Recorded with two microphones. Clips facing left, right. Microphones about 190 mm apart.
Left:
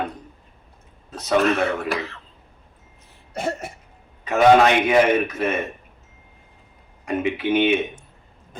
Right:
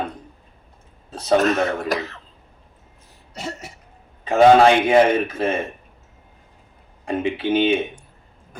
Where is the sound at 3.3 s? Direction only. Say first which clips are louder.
Left 6 dB; 55° left (ahead or behind).